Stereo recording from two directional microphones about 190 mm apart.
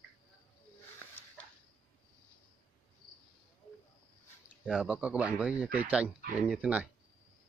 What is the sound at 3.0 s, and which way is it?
Cricket, 25° left (ahead or behind).